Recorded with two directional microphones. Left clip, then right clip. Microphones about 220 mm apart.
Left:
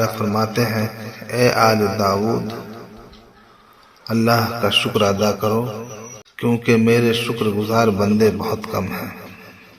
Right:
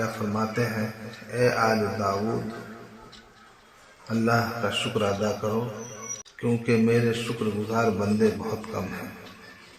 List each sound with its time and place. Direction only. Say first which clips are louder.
0.0 s a man's voice: left 9 dB; 40° left (ahead or behind)
4.1 s a man's voice: left 7 dB; 40° left (ahead or behind)